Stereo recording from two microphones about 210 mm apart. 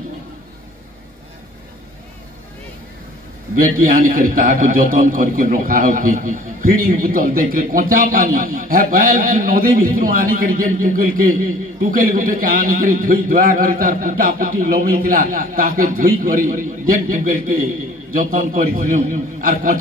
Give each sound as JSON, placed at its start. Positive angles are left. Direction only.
{"t": 3.6, "sound": "a man's voice", "side_deg": -45}